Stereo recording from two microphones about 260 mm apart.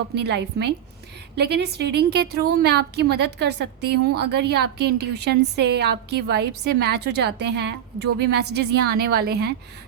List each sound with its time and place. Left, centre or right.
0.1 s a woman's voice: right